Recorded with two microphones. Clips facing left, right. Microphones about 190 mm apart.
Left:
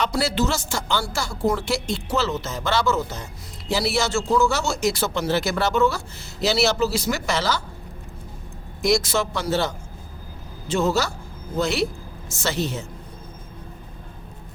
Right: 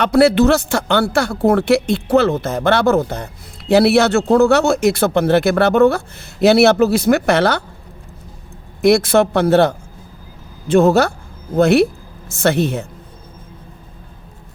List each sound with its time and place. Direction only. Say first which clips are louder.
0.0 s speech: right 11 dB; 60° right (ahead or behind)
8.8 s speech: right 9 dB; 60° right (ahead or behind)